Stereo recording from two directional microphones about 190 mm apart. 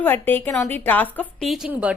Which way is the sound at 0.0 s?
10° left (ahead or behind).